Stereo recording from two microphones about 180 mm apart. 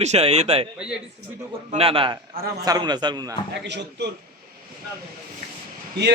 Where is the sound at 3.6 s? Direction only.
70° right (ahead or behind).